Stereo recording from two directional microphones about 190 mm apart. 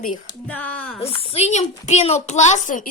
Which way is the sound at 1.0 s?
30° left (ahead or behind).